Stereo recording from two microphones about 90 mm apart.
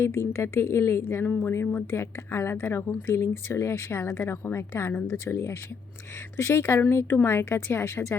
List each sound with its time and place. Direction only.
0.0 s speech: 30° left (ahead or behind)